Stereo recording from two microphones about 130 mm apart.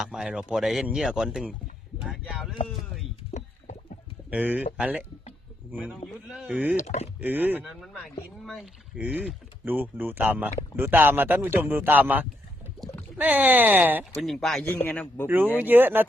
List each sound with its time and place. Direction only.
0.0 s speech: 5° right (ahead or behind)
2.6 s a sound: centre (ahead or behind)
3.3 s a sound: 70° left (ahead or behind)
4.3 s a man's voice: 10° right (ahead or behind)
6.1 s speech: 5° right (ahead or behind)
6.7 s speech: 55° left (ahead or behind)
7.2 s a man's voice: 15° right (ahead or behind)
8.4 s a man's voice: centre (ahead or behind)
14.2 s speech: centre (ahead or behind)
14.6 s a man's voice: 15° left (ahead or behind)
15.5 s a man's voice: 15° right (ahead or behind)